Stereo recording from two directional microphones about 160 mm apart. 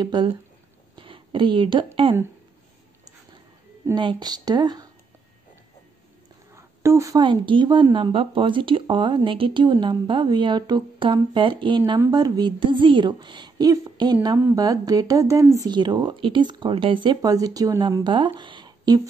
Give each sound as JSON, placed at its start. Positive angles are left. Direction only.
{"t": 0.0, "sound": "speech", "side_deg": -30}
{"t": 0.9, "sound": "a sound", "side_deg": -30}
{"t": 3.9, "sound": "speech", "side_deg": -30}
{"t": 6.5, "sound": "speech", "side_deg": -15}